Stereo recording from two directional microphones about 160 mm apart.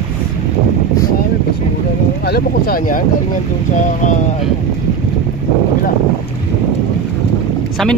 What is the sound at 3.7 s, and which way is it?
Speech, 50° left (ahead or behind).